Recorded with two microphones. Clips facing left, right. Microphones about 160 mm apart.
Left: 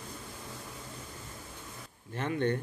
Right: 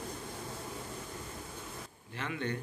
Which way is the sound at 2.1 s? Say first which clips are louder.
Left 6 dB; 45° left (ahead or behind).